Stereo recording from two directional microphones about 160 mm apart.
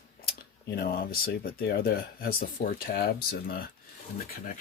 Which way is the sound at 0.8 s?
70° left (ahead or behind).